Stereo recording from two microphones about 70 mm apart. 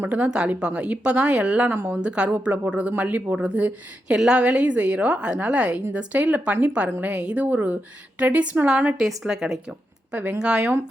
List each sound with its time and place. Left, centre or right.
0.3 s a woman's voice: centre
1.7 s a woman's voice: right
2.0 s a woman's voice: centre
9.0 s a woman's voice: centre
10.1 s a woman's voice: centre